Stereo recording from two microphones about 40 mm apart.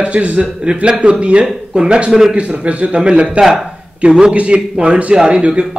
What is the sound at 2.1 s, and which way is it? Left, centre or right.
Speech, centre.